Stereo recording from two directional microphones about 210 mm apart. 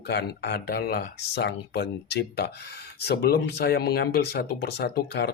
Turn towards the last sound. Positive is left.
turn(degrees=50)  # may be behind; listen again after turning